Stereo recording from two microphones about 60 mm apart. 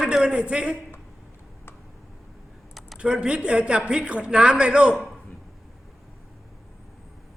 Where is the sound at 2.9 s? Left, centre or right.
Centre.